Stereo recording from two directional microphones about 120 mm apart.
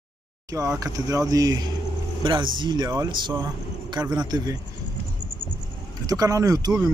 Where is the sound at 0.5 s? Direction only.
30° right (ahead or behind).